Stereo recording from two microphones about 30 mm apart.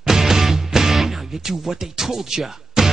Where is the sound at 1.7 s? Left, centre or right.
Centre.